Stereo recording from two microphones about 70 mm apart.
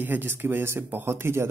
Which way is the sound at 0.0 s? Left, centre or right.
Right.